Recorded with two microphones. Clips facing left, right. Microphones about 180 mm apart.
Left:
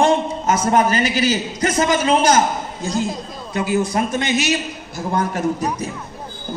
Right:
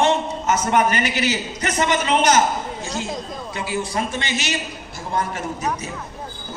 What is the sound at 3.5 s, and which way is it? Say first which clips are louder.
Speech: left 8 dB; 45° left (ahead or behind).